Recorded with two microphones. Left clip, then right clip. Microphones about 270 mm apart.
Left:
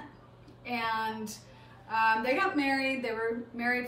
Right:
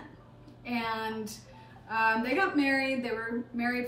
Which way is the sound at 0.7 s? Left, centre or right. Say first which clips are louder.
Left 1 dB; centre.